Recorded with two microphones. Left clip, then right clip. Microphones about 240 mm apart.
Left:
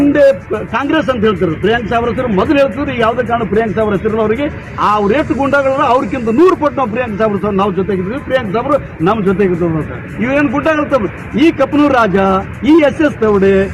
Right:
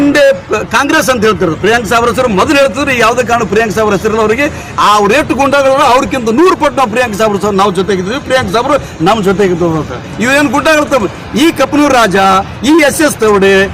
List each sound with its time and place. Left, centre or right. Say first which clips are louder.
0.1 s a man's voice: right 2 dB; right
10.5 s a man's voice: right 4 dB; right